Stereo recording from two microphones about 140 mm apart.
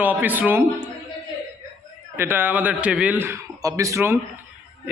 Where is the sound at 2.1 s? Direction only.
15° right (ahead or behind).